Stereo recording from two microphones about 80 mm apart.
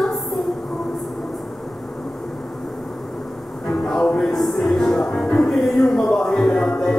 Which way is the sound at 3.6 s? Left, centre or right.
Centre.